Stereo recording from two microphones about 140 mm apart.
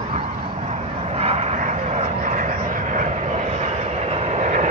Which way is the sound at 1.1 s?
50° right (ahead or behind).